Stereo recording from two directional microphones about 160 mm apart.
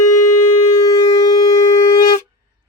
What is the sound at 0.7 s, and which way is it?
Shofar, 20° left (ahead or behind).